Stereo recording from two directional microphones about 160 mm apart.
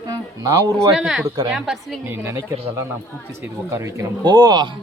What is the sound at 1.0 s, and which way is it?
A woman's voice, centre (ahead or behind).